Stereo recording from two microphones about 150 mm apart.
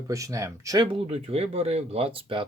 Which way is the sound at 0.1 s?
20° right (ahead or behind).